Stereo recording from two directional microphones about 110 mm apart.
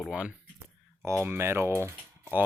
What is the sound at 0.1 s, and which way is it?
Speech, 10° right (ahead or behind).